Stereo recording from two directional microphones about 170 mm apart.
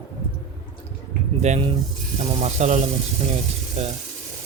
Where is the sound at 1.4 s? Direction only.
40° right (ahead or behind).